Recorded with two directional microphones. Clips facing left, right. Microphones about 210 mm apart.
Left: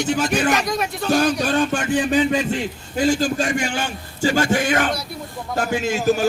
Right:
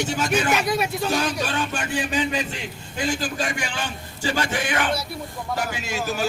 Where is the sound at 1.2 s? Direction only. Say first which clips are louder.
Left 7 dB; 45° left (ahead or behind).